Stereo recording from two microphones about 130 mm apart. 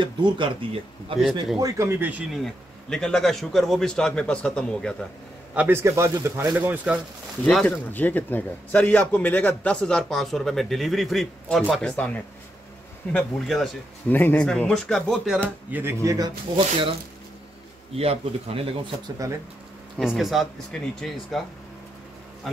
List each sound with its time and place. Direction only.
0.0 s speech: 40° right (ahead or behind)
1.6 s a man's voice: 25° right (ahead or behind)
2.3 s speech: 5° left (ahead or behind)
5.5 s a man's voice: 15° right (ahead or behind)
6.4 s speech: 10° right (ahead or behind)
7.4 s speech: 10° left (ahead or behind)
14.5 s speech: 5° left (ahead or behind)
15.7 s a man's voice: 20° right (ahead or behind)
16.5 s speech: 45° right (ahead or behind)
17.9 s speech: 50° right (ahead or behind)
19.2 s a man's voice: 25° right (ahead or behind)
20.0 s speech: centre (ahead or behind)